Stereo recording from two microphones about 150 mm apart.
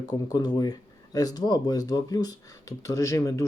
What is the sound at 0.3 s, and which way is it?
Speech, 25° left (ahead or behind).